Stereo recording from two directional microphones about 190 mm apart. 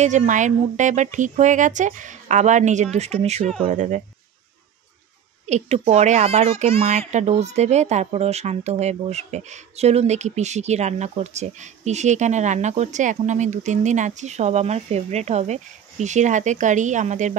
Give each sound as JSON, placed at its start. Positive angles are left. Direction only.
{"t": 0.0, "sound": "a child's voice", "side_deg": -40}
{"t": 5.5, "sound": "a child's voice", "side_deg": -35}